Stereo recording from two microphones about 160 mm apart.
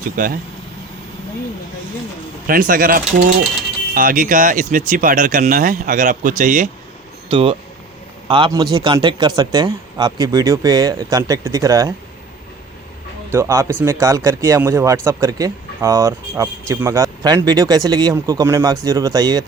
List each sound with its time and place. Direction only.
0.2 s speech: 60° right (ahead or behind)
2.5 s speech: 60° right (ahead or behind)
7.3 s speech: 35° right (ahead or behind)
13.3 s speech: 20° right (ahead or behind)